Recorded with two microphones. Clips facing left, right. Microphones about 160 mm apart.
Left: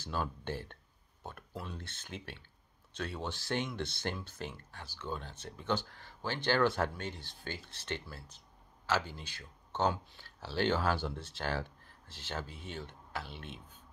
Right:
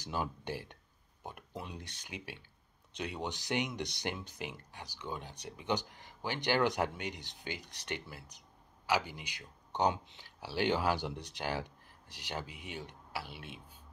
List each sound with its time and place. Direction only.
0.0 s speech: 15° right (ahead or behind)